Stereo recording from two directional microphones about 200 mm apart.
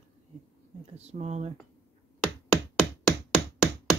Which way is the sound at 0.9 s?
35° right (ahead or behind).